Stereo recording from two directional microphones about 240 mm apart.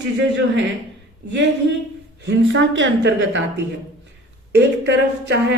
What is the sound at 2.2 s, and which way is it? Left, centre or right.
A woman's voice, right.